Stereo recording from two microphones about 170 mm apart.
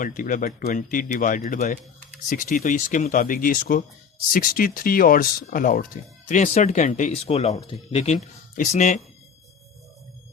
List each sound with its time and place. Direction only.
0.0 s speech: 50° left (ahead or behind)